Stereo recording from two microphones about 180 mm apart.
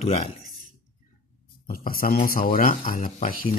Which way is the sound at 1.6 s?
55° left (ahead or behind).